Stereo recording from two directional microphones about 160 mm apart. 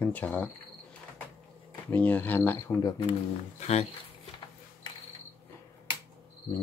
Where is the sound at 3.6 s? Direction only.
45° left (ahead or behind).